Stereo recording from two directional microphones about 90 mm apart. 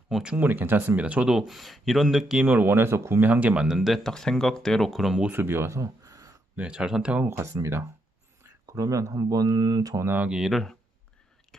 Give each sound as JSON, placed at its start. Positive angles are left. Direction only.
{"t": 0.1, "sound": "speech", "side_deg": -10}
{"t": 0.4, "sound": "speech", "side_deg": -20}
{"t": 2.4, "sound": "speech", "side_deg": -20}
{"t": 5.3, "sound": "speech", "side_deg": -25}
{"t": 6.5, "sound": "speech", "side_deg": -10}
{"t": 7.2, "sound": "speech", "side_deg": -30}
{"t": 9.9, "sound": "speech", "side_deg": -20}
{"t": 10.3, "sound": "speech", "side_deg": 0}